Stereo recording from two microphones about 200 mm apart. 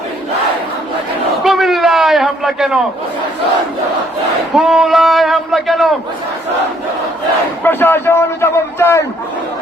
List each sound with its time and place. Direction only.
1.5 s a sound: centre (ahead or behind)
4.5 s a man's voice: centre (ahead or behind)
7.6 s a man's voice: 10° left (ahead or behind)